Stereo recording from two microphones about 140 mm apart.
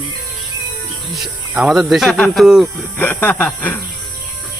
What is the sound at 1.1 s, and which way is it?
Speech, 5° right (ahead or behind).